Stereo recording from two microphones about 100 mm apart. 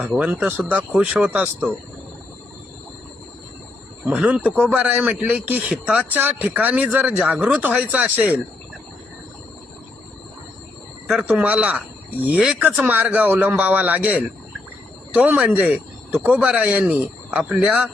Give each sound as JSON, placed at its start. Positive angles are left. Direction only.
{"t": 0.2, "sound": "speech", "side_deg": -15}
{"t": 4.0, "sound": "speech", "side_deg": -10}
{"t": 11.3, "sound": "speech", "side_deg": -15}